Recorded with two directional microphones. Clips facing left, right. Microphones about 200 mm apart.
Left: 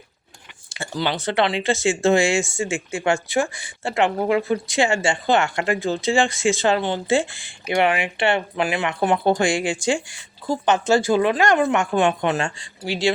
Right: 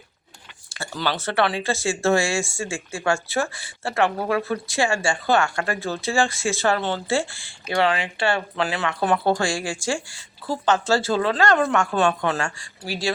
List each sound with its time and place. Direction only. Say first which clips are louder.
0.7 s speech: left 2 dB; 15° left (ahead or behind)